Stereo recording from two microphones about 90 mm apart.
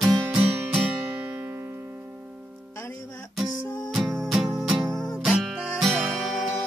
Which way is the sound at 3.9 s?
Centre (ahead or behind).